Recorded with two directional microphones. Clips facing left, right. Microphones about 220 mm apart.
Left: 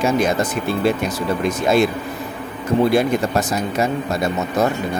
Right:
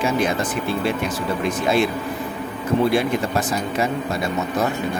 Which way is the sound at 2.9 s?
40° left (ahead or behind).